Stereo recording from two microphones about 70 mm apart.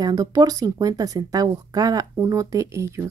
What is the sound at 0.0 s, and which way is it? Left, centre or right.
Speech, right.